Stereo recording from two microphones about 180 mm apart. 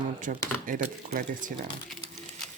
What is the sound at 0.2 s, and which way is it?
Speech, 50° right (ahead or behind).